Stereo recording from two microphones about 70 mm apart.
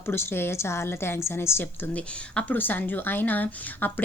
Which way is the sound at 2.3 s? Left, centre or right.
Left.